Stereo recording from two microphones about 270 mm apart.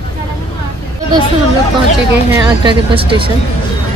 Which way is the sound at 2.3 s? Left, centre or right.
Centre.